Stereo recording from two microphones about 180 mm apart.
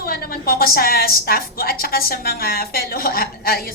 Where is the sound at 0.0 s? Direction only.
55° left (ahead or behind).